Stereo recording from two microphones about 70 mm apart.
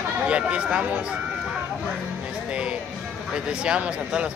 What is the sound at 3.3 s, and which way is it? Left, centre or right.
Speech, centre.